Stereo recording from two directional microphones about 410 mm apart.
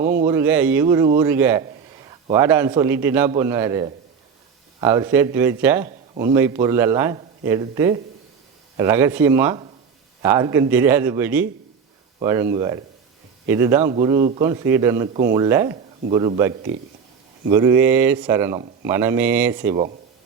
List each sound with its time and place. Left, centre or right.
0.0 s a sound: centre
0.3 s speech: centre
17.5 s speech: centre